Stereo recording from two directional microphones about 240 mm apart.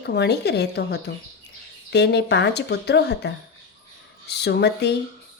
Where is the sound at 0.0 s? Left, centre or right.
Left.